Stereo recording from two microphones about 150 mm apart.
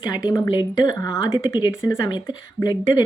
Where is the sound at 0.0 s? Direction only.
25° left (ahead or behind).